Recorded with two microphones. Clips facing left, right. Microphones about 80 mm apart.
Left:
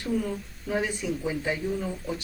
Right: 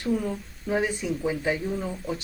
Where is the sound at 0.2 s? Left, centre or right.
Centre.